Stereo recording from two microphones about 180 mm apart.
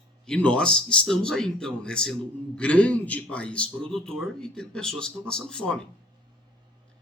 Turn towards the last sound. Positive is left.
turn(degrees=5)  # may be behind; listen again after turning